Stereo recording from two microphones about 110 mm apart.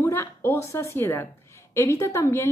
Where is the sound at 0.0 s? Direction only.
25° left (ahead or behind).